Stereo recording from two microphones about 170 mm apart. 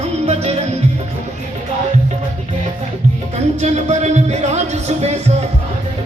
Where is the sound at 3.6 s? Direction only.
40° right (ahead or behind).